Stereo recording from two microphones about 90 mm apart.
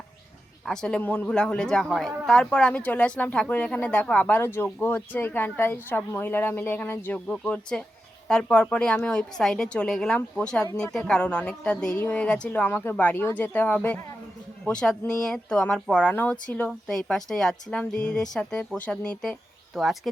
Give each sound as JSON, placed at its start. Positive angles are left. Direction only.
{"t": 0.6, "sound": "speech", "side_deg": 5}
{"t": 7.3, "sound": "speech", "side_deg": 10}
{"t": 14.6, "sound": "speech", "side_deg": 5}